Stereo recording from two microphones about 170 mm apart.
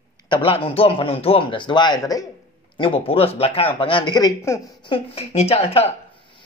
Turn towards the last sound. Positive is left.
turn(degrees=35)  # may be behind; listen again after turning